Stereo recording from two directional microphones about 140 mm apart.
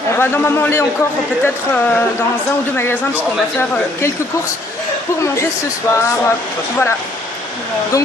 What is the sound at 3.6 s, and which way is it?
Speech, 15° left (ahead or behind).